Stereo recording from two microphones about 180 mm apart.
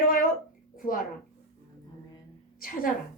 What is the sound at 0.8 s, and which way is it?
Speech, 50° left (ahead or behind).